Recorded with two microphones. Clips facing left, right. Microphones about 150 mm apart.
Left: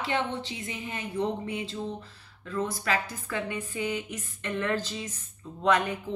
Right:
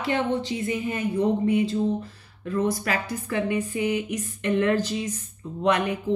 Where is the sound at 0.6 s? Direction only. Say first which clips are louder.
Right 10 dB; 55° right (ahead or behind).